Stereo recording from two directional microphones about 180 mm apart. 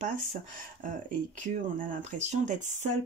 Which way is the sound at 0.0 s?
45° right (ahead or behind).